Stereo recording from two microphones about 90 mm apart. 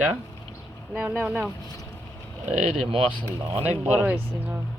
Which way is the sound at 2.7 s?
90° right.